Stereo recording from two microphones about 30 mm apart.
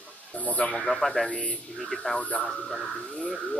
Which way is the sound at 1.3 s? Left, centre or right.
Left.